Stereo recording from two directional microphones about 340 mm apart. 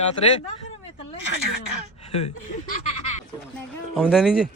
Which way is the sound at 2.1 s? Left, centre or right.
Centre.